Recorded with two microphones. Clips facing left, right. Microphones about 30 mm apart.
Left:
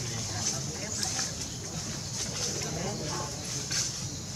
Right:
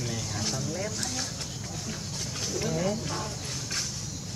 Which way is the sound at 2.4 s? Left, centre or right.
Centre.